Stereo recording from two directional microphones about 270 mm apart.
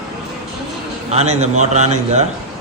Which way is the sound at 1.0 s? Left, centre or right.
Right.